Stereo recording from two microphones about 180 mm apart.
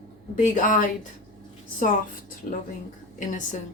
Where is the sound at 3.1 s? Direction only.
45° left (ahead or behind).